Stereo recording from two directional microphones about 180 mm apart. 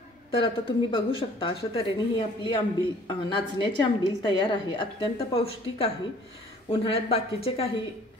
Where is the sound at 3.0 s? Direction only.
25° left (ahead or behind).